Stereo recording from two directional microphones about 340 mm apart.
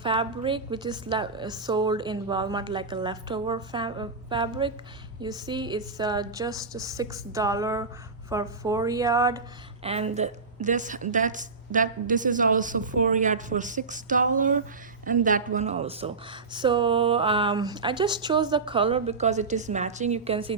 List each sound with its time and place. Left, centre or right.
0.0 s a woman's voice: centre